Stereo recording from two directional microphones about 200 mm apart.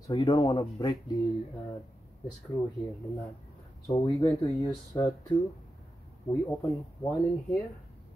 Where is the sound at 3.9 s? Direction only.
15° left (ahead or behind).